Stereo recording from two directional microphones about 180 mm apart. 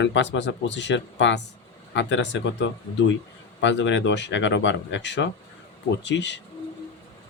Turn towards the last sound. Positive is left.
turn(degrees=80)